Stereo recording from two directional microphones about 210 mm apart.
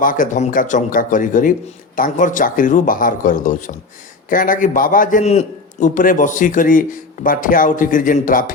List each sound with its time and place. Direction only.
0.0 s a man's voice: 40° left (ahead or behind)